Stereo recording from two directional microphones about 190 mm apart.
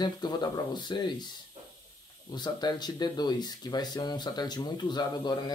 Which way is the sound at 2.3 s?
20° left (ahead or behind).